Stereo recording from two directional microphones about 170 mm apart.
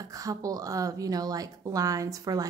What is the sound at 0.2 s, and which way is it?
A woman's voice, 20° right (ahead or behind).